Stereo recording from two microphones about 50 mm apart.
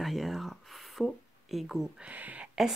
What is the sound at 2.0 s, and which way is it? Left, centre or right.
Speech, right.